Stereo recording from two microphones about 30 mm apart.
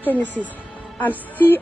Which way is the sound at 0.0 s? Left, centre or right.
Left.